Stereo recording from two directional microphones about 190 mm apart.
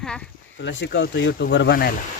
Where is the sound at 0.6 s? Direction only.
70° left (ahead or behind); by 1.9 s 55° left (ahead or behind).